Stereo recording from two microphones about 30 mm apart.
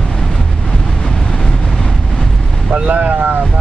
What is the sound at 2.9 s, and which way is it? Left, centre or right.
Boat, right.